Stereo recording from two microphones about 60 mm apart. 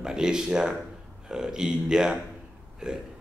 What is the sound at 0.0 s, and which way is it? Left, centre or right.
A man's voice, centre.